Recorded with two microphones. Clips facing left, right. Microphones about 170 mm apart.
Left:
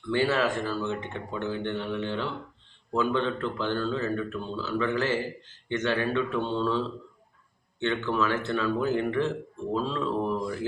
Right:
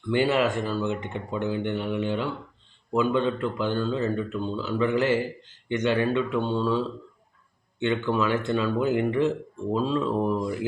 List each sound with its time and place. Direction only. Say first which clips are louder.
0.1 s speech: right 3 dB; 15° right (ahead or behind)